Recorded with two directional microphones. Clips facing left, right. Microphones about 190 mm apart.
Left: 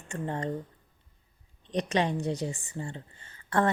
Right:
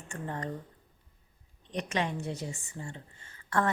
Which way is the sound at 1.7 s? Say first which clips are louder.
Left 5 dB; 35° left (ahead or behind).